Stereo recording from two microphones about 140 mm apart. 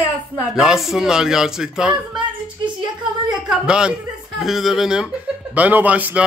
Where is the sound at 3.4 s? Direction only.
5° right (ahead or behind).